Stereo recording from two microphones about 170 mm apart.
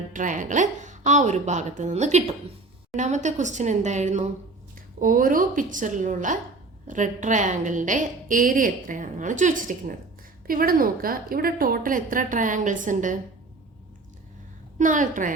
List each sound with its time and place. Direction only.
0.1 s a woman's voice: 50° right (ahead or behind)
4.9 s a woman's voice: 55° right (ahead or behind)
14.8 s a woman's voice: 50° right (ahead or behind)